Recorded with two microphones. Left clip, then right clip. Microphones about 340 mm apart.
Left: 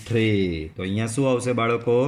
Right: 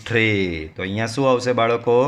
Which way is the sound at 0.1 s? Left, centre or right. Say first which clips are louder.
Right 4 dB; right.